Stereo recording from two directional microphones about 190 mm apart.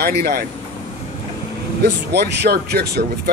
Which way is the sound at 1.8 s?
60° right (ahead or behind).